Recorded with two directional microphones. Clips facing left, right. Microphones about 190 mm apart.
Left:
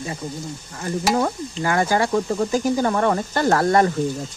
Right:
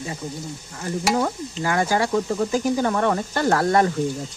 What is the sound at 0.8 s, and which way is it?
Stir, 50° left (ahead or behind).